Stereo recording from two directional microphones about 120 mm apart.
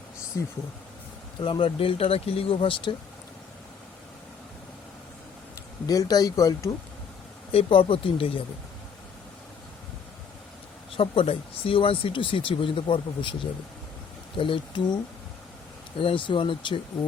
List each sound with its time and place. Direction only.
0.4 s speech: 25° left (ahead or behind)
1.4 s speech: 45° left (ahead or behind)
5.8 s speech: 30° left (ahead or behind)
7.5 s speech: 45° left (ahead or behind)
10.9 s speech: 50° left (ahead or behind)